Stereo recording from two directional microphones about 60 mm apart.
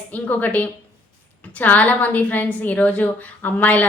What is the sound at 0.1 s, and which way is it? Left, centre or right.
A woman's voice, left.